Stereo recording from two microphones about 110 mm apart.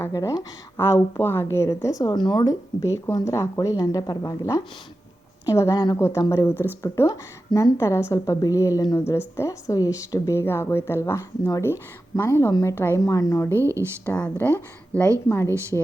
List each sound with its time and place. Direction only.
0.1 s speech: 30° left (ahead or behind)
6.0 s speech: 25° left (ahead or behind)
9.0 s speech: 25° left (ahead or behind)
13.5 s speech: 25° right (ahead or behind)
14.0 s speech: 20° left (ahead or behind)